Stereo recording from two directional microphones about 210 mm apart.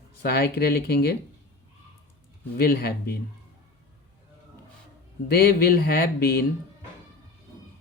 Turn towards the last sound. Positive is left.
turn(degrees=50)  # may be behind; listen again after turning